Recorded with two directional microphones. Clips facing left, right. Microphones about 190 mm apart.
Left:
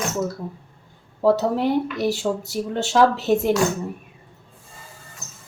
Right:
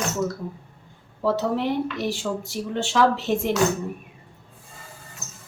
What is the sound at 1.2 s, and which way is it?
Speech, 40° left (ahead or behind).